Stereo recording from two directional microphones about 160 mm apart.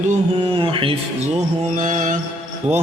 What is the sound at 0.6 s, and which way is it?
Mantra, 35° right (ahead or behind).